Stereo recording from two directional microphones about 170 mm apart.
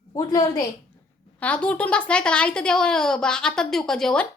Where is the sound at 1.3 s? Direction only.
5° left (ahead or behind).